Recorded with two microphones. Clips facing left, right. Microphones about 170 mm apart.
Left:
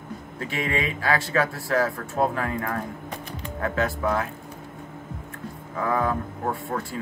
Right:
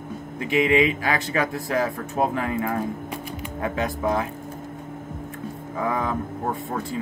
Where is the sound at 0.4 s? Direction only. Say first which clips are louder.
Right 8 dB; 15° right (ahead or behind).